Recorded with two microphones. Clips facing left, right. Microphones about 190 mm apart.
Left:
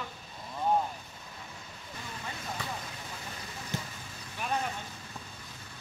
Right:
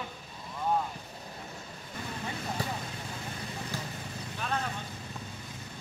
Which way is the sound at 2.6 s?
35° right (ahead or behind).